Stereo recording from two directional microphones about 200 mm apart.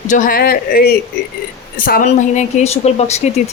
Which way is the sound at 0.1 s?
45° left (ahead or behind).